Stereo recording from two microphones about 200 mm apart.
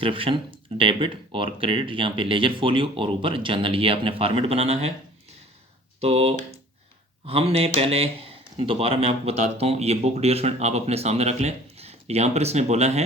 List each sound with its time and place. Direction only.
0.0 s speech: 25° right (ahead or behind)
6.0 s speech: 30° right (ahead or behind)